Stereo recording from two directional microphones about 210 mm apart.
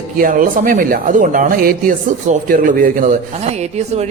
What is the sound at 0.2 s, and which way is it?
Speech, 40° right (ahead or behind).